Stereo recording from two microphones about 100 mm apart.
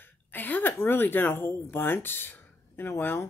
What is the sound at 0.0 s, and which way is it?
A woman's voice, 20° left (ahead or behind).